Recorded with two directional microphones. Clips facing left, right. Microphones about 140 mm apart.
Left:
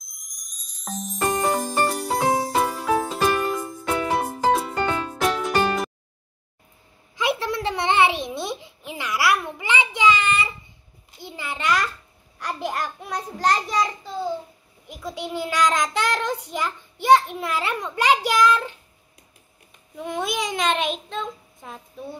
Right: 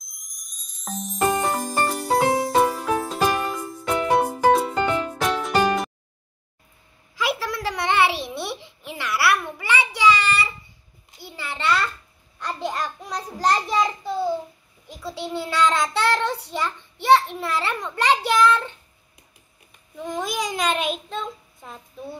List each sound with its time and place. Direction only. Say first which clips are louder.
0.0 s music: even; centre (ahead or behind)
7.2 s a sound: left 2 dB; 20° left (ahead or behind); by 13.8 s centre (ahead or behind)
14.9 s child singing: even; 15° left (ahead or behind)
20.0 s child singing: left 1 dB; 5° left (ahead or behind)